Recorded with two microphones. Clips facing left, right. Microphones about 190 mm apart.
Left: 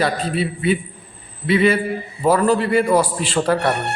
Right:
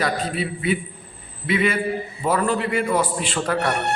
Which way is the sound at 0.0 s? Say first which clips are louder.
Left 4 dB; 30° left (ahead or behind).